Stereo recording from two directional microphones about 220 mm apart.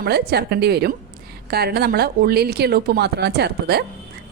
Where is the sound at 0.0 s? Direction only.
45° right (ahead or behind).